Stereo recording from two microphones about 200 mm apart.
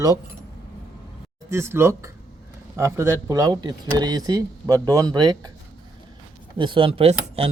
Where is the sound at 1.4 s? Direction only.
15° right (ahead or behind).